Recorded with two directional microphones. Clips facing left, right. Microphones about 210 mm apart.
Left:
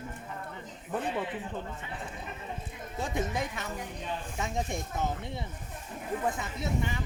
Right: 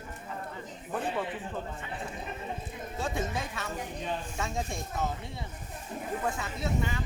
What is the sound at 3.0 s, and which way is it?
Speech, 20° left (ahead or behind).